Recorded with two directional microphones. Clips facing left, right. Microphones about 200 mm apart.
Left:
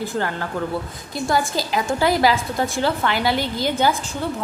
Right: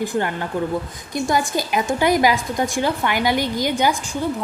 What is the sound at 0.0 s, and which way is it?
A woman's voice, 15° right (ahead or behind).